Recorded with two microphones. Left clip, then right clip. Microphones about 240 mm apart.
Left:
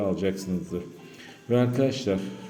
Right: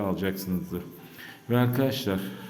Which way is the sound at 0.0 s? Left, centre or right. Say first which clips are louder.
Left 3 dB; centre.